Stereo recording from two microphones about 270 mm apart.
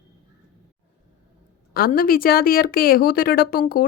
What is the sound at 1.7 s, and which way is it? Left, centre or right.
Speech, left.